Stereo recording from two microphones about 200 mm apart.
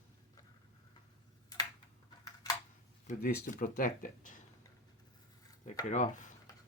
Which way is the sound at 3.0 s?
40° left (ahead or behind).